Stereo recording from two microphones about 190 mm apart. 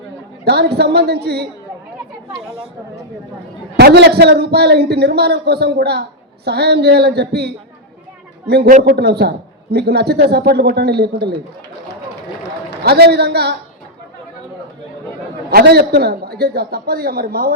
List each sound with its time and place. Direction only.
0.4 s a man's voice: 60° right (ahead or behind)
3.8 s a man's voice: 60° right (ahead or behind)
12.8 s a man's voice: 55° right (ahead or behind)
15.4 s a man's voice: 55° right (ahead or behind)